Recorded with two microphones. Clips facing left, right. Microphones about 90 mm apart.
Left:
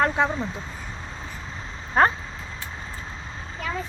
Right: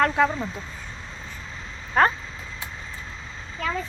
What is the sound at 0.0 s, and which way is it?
Speech, 20° left (ahead or behind).